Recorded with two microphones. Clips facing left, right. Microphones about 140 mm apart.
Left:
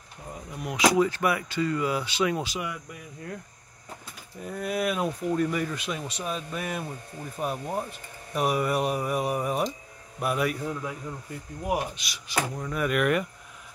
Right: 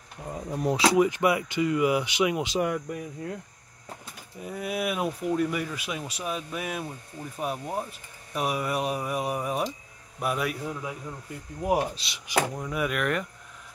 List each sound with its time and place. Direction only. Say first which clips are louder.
0.3 s speech: right 8 dB; 30° right (ahead or behind)
0.9 s speech: right 2 dB; 15° right (ahead or behind)
2.6 s speech: right 8 dB; 45° right (ahead or behind)
4.4 s speech: left 1 dB; 5° right (ahead or behind)
11.6 s speech: right 3 dB; 30° right (ahead or behind)
12.5 s speech: left 2 dB; 10° right (ahead or behind)